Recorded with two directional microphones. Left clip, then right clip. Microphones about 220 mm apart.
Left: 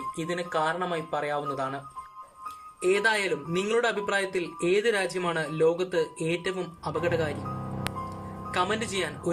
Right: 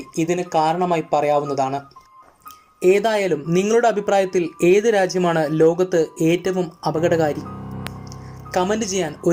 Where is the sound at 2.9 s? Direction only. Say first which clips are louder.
Right 8 dB; 15° right (ahead or behind).